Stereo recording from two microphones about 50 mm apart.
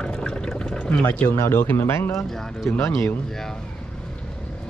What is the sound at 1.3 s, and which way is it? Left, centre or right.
Speech, left.